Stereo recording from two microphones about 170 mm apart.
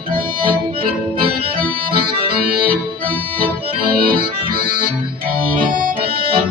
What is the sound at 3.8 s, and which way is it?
Accordion, 60° right (ahead or behind).